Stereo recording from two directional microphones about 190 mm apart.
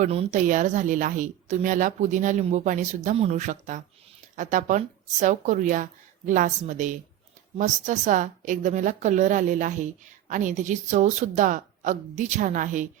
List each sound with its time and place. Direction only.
0.0 s a woman's voice: 35° right (ahead or behind)